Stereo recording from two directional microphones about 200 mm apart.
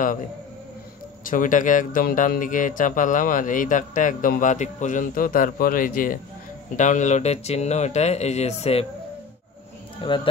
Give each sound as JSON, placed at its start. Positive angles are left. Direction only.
{"t": 1.2, "sound": "speech", "side_deg": 40}
{"t": 10.0, "sound": "speech", "side_deg": 25}